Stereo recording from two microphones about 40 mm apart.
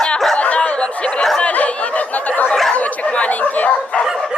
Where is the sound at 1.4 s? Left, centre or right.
Left.